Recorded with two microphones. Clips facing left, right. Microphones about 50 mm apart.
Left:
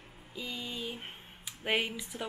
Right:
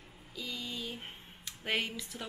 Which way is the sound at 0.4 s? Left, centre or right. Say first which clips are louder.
Left 1 dB; left.